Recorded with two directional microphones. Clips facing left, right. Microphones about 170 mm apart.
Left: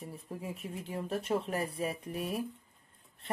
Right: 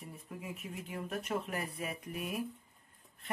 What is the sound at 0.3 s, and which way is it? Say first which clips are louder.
Speech: left 3 dB; 30° left (ahead or behind).